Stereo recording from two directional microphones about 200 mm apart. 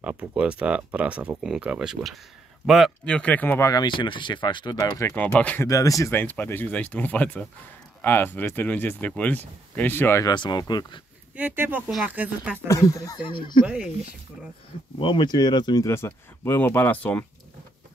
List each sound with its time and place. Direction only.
0.0 s speech: 5° right (ahead or behind); by 11.0 s 20° left (ahead or behind)
11.3 s speech: 10° right (ahead or behind)
12.6 s speech: 15° left (ahead or behind)
13.7 s speech: 5° right (ahead or behind)
15.0 s speech: 25° left (ahead or behind); by 17.3 s 10° left (ahead or behind)